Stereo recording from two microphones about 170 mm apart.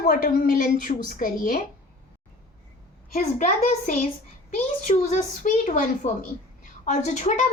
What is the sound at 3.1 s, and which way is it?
A child's voice, 40° left (ahead or behind).